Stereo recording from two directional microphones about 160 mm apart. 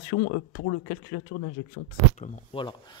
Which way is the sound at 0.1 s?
65° left (ahead or behind).